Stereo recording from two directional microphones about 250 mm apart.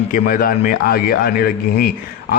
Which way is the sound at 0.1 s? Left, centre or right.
Left.